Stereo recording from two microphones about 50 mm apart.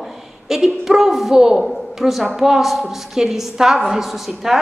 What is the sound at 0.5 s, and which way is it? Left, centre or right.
A woman's voice, centre.